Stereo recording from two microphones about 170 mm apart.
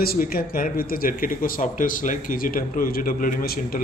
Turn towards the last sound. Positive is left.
turn(degrees=60)  # may be behind; listen again after turning